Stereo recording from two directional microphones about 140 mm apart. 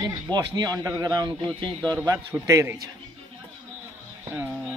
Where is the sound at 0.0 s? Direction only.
30° right (ahead or behind).